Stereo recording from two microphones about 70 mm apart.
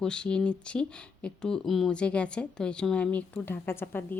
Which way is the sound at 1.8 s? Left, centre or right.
Centre.